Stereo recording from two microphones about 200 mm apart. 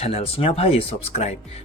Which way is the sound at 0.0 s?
30° left (ahead or behind).